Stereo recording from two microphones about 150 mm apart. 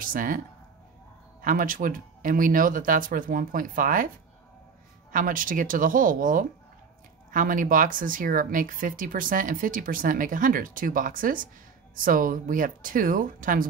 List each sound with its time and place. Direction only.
0.0 s speech: 65° right (ahead or behind)
1.4 s speech: 65° right (ahead or behind)
5.1 s speech: 65° right (ahead or behind)